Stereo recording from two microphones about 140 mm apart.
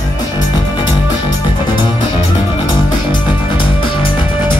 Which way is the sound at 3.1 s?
35° left (ahead or behind).